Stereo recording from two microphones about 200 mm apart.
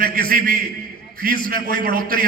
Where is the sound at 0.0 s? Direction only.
45° right (ahead or behind).